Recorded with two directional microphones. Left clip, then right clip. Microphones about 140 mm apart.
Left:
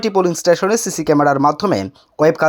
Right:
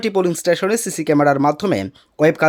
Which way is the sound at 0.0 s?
5° right (ahead or behind).